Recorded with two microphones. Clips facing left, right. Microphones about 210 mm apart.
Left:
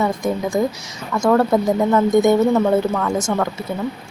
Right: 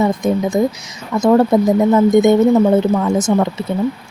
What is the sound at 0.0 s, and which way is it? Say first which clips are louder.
Speech: right 4 dB; 20° right (ahead or behind).